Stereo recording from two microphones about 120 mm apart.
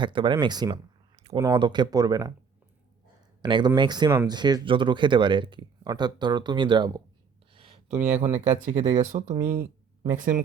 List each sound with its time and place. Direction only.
0.0 s speech: 40° right (ahead or behind); by 1.5 s 25° right (ahead or behind)
1.5 s speech: 40° right (ahead or behind)
3.4 s speech: 40° right (ahead or behind)
7.5 s a sound: 50° right (ahead or behind)
7.9 s speech: 15° right (ahead or behind)
8.3 s speech: 80° right
9.1 s speech: 65° right (ahead or behind)
9.4 s a sound: 20° right (ahead or behind)
10.2 s speech: 90° right